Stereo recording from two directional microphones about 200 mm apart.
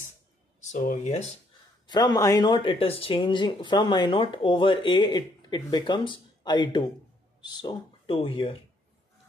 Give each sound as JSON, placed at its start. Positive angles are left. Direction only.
{"t": 0.7, "sound": "speech", "side_deg": 40}
{"t": 1.9, "sound": "speech", "side_deg": 20}